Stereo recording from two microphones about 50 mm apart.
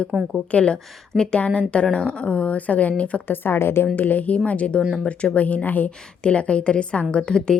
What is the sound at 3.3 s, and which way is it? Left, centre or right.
Speech, left.